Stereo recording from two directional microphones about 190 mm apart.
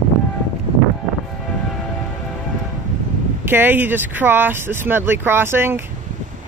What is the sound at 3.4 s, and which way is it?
Speech, 10° right (ahead or behind).